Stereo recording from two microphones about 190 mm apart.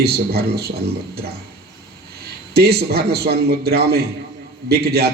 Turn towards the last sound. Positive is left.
turn(degrees=-55)  # may be behind; listen again after turning